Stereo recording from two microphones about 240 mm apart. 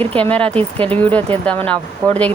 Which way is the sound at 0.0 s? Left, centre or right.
Right.